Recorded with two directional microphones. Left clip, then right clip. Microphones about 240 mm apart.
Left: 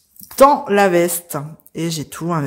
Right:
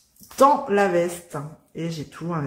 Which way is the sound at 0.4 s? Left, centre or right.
Left.